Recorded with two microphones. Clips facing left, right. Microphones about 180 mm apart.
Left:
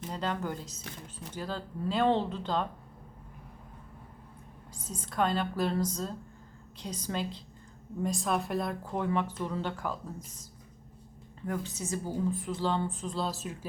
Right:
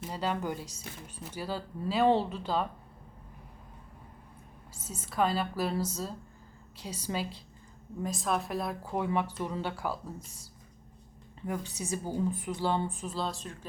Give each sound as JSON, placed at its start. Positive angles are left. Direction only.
{"t": 0.0, "sound": "speech", "side_deg": -10}
{"t": 4.8, "sound": "a woman's voice", "side_deg": -5}
{"t": 11.4, "sound": "speech", "side_deg": -10}
{"t": 13.1, "sound": "a woman's voice", "side_deg": 5}